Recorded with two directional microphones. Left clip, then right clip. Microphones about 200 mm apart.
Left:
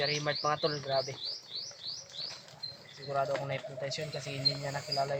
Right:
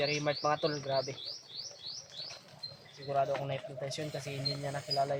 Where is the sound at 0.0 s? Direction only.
50° right (ahead or behind).